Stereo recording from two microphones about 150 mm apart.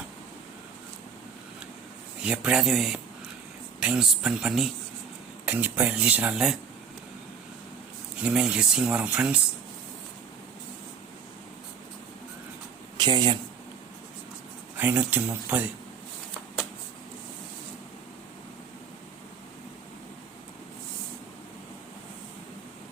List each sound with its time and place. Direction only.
2.2 s speech: 5° right (ahead or behind)
8.2 s speech: 5° right (ahead or behind)
13.0 s speech: 30° right (ahead or behind)
14.8 s speech: 10° right (ahead or behind)